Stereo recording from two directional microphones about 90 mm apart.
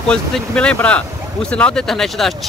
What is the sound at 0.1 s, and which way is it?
Speech, 10° left (ahead or behind).